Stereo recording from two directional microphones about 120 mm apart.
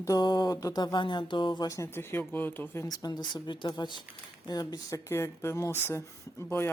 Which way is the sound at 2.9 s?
35° left (ahead or behind).